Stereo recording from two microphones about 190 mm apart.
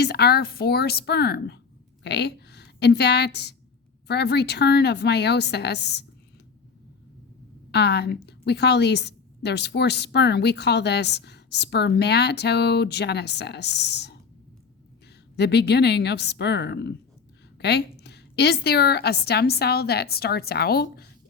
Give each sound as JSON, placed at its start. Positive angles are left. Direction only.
{"t": 0.0, "sound": "a woman's voice", "side_deg": 60}
{"t": 7.7, "sound": "a woman's voice", "side_deg": 60}
{"t": 15.4, "sound": "a woman's voice", "side_deg": 60}